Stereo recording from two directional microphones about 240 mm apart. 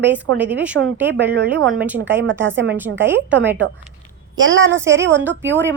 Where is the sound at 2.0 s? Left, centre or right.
Right.